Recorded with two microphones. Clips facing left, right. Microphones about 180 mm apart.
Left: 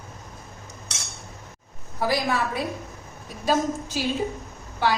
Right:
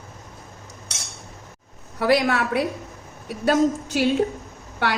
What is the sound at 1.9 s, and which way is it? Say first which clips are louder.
A woman's voice: right 5 dB; 70° right (ahead or behind).